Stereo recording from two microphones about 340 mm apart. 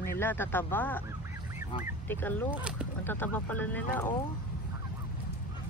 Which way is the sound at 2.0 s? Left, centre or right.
Centre.